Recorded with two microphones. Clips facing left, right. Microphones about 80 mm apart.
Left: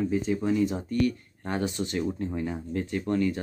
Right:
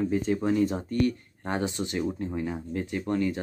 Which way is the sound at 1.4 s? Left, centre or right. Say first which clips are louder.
Even; right.